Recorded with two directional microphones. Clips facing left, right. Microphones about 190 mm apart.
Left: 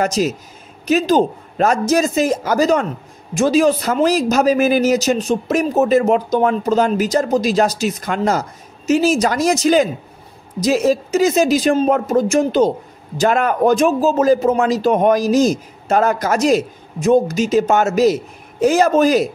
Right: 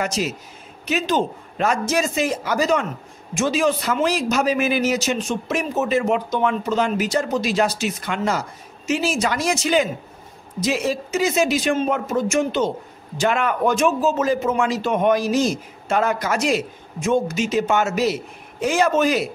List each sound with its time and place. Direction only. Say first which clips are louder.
0.0 s speech: left 6 dB; 40° left (ahead or behind)